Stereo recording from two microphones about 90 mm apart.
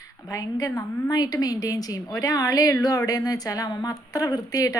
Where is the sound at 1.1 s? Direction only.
50° left (ahead or behind).